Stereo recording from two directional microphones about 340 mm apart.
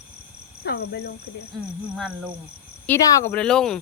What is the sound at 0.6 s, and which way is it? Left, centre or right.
Speech, left.